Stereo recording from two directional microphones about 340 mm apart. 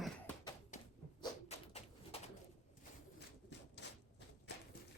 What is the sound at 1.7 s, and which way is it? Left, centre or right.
Bird, centre.